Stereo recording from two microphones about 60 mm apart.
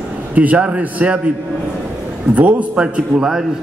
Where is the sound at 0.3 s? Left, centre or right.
Right.